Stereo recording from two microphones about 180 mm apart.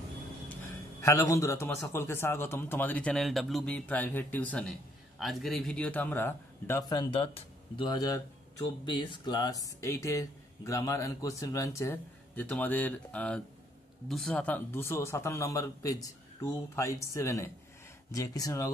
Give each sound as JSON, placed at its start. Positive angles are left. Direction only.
{"t": 1.0, "sound": "speech", "side_deg": 15}